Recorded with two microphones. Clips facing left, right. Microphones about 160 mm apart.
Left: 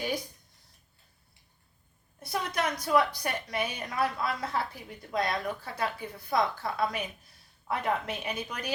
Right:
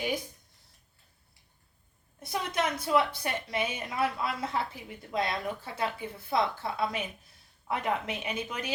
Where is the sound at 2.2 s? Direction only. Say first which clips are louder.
Even; 25° right (ahead or behind).